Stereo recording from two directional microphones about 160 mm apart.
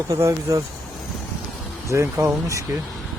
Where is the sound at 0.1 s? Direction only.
20° right (ahead or behind).